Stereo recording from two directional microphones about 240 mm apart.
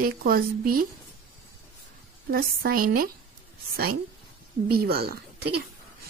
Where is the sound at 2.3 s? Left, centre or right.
Right.